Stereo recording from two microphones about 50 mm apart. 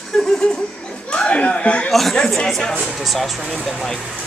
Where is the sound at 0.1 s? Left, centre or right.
Centre.